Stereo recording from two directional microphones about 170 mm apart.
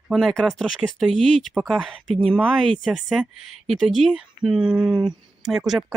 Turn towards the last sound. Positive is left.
turn(degrees=0)  # may be behind; listen again after turning